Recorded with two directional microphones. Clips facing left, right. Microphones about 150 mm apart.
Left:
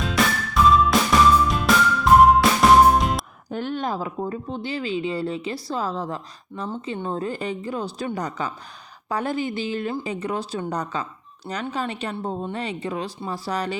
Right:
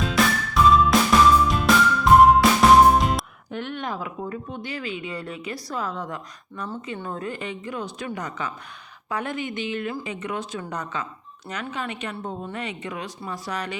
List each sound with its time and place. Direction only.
0.0 s music: centre (ahead or behind)
3.5 s speech: 35° left (ahead or behind)